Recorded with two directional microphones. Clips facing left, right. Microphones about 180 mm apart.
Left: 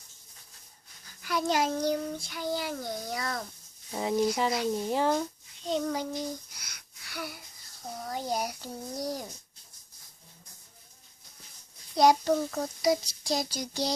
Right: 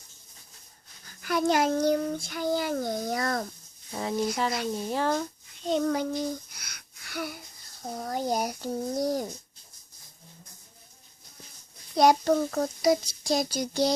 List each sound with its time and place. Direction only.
1.2 s child singing: 55° right (ahead or behind)
4.4 s speech: 15° left (ahead or behind)
5.6 s child singing: 55° right (ahead or behind)
6.6 s a sound: 60° right (ahead or behind)
7.9 s child singing: 45° right (ahead or behind)
11.9 s child singing: 55° right (ahead or behind)